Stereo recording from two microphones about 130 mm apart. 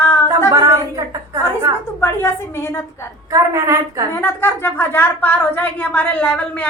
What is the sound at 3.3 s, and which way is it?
Speech, 25° right (ahead or behind).